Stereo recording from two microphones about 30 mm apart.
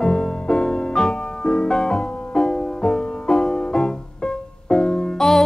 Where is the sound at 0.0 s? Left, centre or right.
Left.